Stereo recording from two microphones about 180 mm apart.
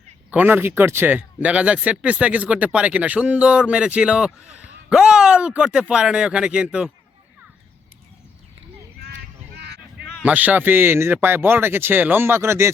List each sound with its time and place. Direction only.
0.3 s speech: 10° right (ahead or behind)
9.6 s a sound: 70° right (ahead or behind)
10.2 s speech: 10° right (ahead or behind)